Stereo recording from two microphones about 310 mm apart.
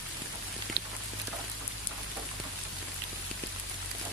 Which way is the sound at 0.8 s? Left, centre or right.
Right.